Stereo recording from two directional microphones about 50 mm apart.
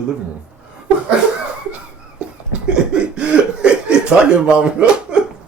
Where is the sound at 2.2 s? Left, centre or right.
Right.